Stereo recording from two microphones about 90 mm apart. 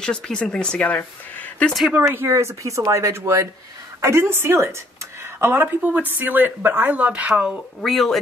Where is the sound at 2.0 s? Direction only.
30° right (ahead or behind).